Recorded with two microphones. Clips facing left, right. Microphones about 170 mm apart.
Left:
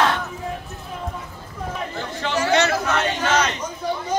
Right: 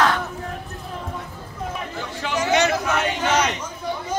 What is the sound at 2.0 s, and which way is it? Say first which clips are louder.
Chatter: left 2 dB; 15° right (ahead or behind).